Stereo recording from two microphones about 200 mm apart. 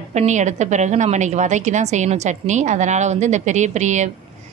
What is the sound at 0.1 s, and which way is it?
A woman's voice, 35° right (ahead or behind).